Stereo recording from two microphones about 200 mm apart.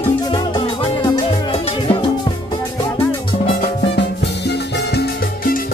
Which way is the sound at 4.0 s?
60° left (ahead or behind).